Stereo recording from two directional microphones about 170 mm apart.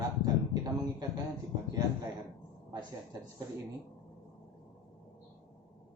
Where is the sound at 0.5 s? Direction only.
25° right (ahead or behind).